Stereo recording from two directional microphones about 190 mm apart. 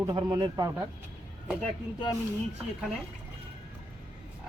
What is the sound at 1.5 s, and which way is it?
Speech, 5° left (ahead or behind).